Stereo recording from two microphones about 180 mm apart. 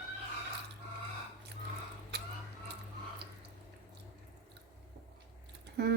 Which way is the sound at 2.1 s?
65° right (ahead or behind).